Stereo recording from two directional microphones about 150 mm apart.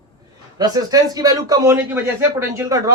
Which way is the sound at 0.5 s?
25° right (ahead or behind).